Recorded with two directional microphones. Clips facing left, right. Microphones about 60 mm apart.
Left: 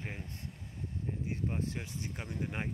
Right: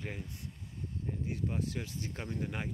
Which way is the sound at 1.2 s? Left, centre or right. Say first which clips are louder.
Even; left.